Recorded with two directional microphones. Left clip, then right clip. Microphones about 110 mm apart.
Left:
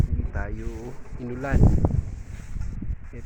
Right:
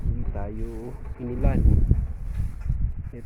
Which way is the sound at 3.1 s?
30° right (ahead or behind).